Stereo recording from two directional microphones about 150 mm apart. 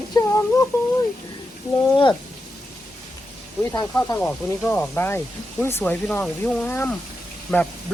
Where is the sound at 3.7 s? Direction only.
25° left (ahead or behind).